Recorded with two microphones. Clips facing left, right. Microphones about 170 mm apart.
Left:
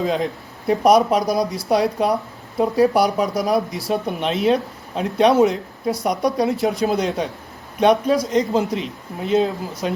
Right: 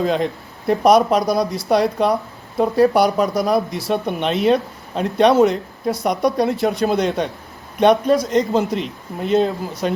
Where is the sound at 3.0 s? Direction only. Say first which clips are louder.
Right 2 dB; 65° right (ahead or behind).